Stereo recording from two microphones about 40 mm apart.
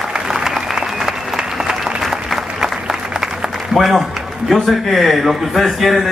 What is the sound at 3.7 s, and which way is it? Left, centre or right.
A man's voice, centre.